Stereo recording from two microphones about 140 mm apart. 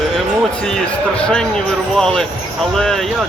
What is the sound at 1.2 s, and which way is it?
Speech, 5° left (ahead or behind).